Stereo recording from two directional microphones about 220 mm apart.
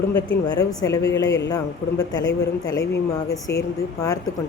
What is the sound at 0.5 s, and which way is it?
A woman's voice, 15° left (ahead or behind).